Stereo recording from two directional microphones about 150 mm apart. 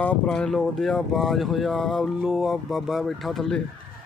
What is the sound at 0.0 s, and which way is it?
Speech, 10° left (ahead or behind).